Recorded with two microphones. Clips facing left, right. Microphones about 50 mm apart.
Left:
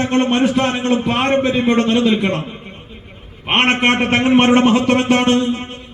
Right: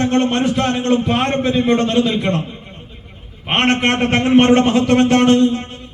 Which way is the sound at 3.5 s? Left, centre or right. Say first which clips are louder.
Left 1 dB; centre.